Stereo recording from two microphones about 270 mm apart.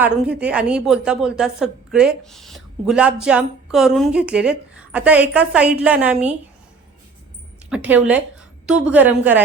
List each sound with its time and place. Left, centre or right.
0.0 s a woman's voice: centre
7.7 s a woman's voice: centre